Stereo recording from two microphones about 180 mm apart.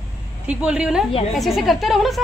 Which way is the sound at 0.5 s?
5° right (ahead or behind).